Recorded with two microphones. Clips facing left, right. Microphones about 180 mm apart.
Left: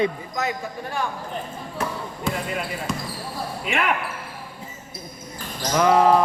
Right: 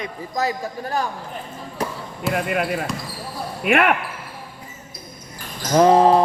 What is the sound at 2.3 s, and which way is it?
Speech, 65° right (ahead or behind).